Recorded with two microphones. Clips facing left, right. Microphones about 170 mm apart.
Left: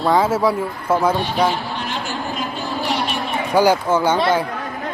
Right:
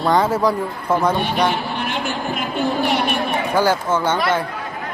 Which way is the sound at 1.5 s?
60° right (ahead or behind).